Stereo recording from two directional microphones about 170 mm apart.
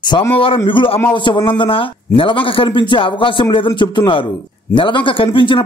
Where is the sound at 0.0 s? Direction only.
25° left (ahead or behind).